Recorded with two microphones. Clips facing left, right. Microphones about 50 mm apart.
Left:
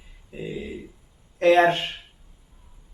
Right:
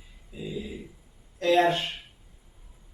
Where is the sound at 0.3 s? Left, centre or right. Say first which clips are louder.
Left 3 dB; left.